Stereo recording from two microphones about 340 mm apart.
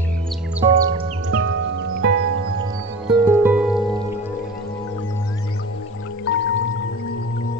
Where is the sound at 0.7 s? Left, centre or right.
Right.